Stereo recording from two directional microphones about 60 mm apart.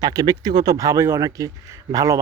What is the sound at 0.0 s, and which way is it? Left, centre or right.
Speech, right.